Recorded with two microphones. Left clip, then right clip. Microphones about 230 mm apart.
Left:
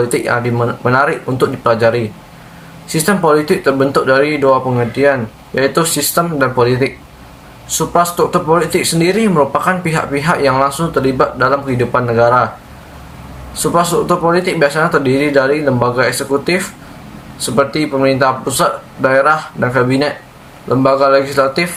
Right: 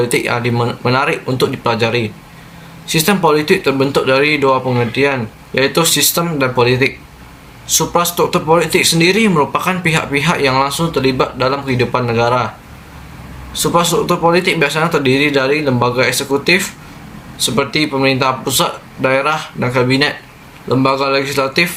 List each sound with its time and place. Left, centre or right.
0.0 s speech: centre
14.1 s speech: centre